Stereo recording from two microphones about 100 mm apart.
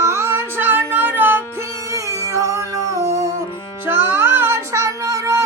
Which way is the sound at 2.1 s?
30° left (ahead or behind).